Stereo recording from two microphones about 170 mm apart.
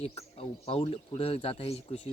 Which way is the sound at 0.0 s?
35° left (ahead or behind).